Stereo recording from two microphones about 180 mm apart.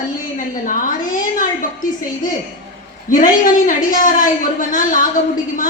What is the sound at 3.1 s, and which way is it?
A woman's voice, 45° left (ahead or behind).